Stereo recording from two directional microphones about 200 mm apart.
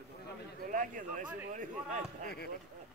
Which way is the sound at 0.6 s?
40° right (ahead or behind).